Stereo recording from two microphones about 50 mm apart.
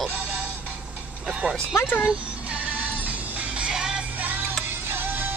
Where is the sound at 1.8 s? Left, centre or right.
Left.